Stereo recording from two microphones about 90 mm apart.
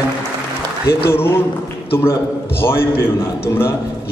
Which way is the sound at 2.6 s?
25° left (ahead or behind).